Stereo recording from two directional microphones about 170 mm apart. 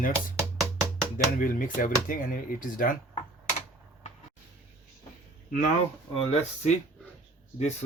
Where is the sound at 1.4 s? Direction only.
55° left (ahead or behind).